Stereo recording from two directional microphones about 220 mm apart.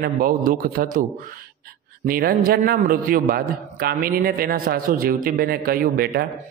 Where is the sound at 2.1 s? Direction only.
40° right (ahead or behind).